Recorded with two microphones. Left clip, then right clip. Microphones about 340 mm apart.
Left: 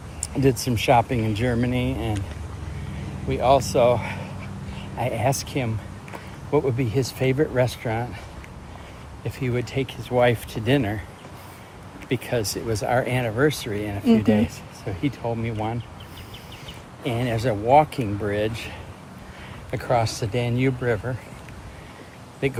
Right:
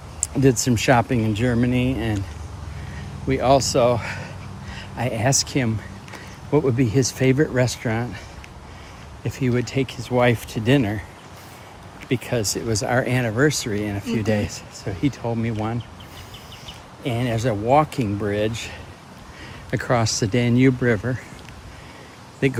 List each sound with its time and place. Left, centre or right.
0.3 s speech: right
3.2 s speech: right
9.6 s speech: right
12.0 s speech: right
17.0 s speech: right
22.4 s speech: right